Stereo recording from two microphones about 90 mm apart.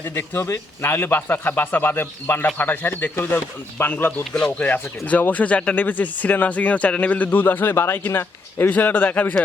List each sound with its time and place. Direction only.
0.0 s speech: 25° left (ahead or behind)
4.2 s speech: 10° left (ahead or behind)